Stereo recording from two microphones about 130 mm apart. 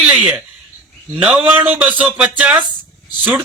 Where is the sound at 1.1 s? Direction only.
15° right (ahead or behind).